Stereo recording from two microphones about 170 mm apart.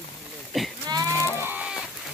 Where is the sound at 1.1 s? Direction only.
15° left (ahead or behind).